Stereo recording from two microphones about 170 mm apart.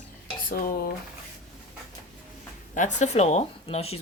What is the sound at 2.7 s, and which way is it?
Speech, 45° left (ahead or behind).